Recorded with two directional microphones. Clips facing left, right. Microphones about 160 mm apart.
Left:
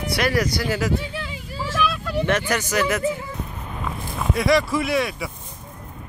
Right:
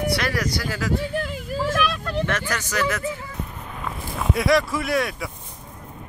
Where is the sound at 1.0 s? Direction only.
50° right (ahead or behind).